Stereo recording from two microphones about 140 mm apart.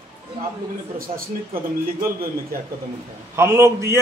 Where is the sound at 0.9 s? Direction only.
90° right.